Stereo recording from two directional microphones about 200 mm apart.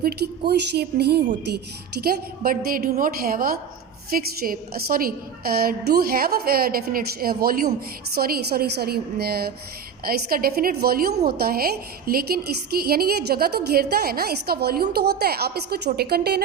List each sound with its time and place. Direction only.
0.0 s a woman's voice: 55° right (ahead or behind)